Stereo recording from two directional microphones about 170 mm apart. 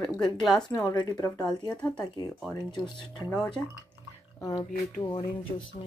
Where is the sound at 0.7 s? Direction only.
25° left (ahead or behind).